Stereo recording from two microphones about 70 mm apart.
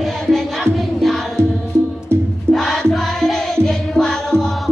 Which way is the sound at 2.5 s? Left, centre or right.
Centre.